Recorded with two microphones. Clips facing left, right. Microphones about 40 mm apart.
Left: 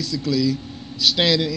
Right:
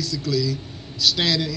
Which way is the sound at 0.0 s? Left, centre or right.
Left.